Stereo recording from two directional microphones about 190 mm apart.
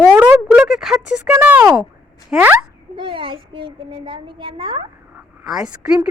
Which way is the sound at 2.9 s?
25° right (ahead or behind).